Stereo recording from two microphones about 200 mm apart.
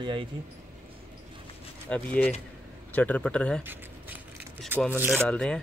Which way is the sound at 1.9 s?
5° left (ahead or behind).